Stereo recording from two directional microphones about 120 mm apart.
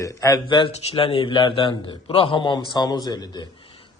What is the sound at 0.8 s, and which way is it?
A man's voice, 50° left (ahead or behind).